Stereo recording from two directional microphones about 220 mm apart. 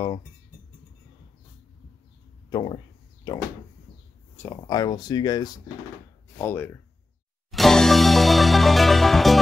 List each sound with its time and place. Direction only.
2.5 s speech: 20° left (ahead or behind)
7.5 s music: centre (ahead or behind)